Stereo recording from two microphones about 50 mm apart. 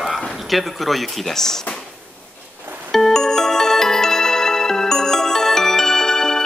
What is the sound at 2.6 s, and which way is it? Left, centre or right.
Music, right.